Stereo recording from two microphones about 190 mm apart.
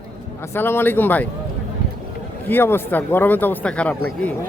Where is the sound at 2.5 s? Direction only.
10° left (ahead or behind).